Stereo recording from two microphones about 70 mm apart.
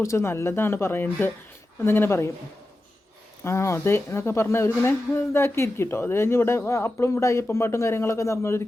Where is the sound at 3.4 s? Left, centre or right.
Left.